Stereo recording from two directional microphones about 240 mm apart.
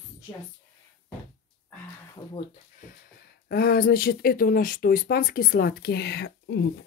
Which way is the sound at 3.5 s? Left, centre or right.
Left.